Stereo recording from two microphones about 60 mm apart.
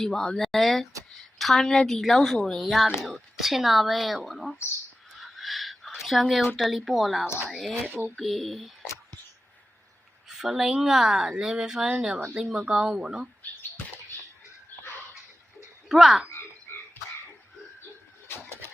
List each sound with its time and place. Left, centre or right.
0.0 s speech: centre
5.2 s chicken: centre
6.6 s speech: centre
10.2 s speech: centre
15.9 s speech: centre
18.3 s bird: left